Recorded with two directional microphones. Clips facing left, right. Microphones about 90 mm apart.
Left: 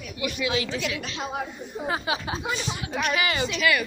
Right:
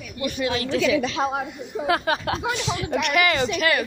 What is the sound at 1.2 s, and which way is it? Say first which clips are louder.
A woman's voice: right 5 dB; 80° right.